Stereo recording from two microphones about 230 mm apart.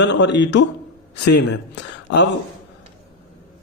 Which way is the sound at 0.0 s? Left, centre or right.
Left.